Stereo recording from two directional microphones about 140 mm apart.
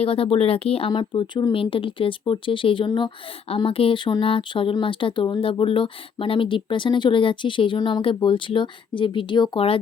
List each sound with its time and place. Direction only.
0.0 s speech: 45° left (ahead or behind)